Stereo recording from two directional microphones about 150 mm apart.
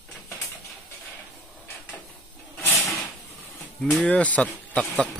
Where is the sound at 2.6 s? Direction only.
20° left (ahead or behind).